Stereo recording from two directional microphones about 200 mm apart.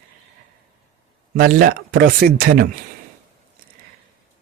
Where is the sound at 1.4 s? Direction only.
45° right (ahead or behind).